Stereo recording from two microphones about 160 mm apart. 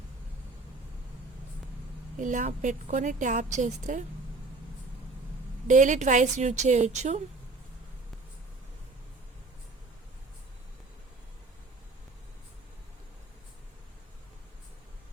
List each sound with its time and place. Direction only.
2.1 s a woman's voice: 50° right (ahead or behind)
5.6 s a woman's voice: 50° right (ahead or behind)